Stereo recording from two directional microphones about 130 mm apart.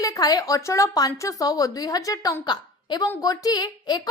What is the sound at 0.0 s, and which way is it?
A woman's voice, 30° left (ahead or behind).